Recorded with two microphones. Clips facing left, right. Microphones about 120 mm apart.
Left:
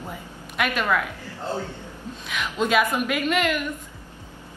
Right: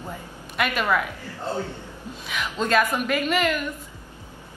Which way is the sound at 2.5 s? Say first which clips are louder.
Even; 5° left (ahead or behind).